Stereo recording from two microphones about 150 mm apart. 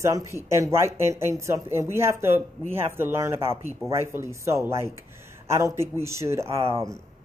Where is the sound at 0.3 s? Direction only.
20° right (ahead or behind).